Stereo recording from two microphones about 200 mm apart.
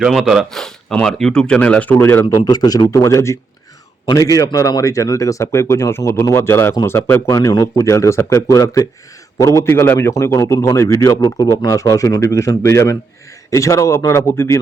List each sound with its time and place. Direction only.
0.0 s speech: centre (ahead or behind)
2.2 s speech: 20° left (ahead or behind)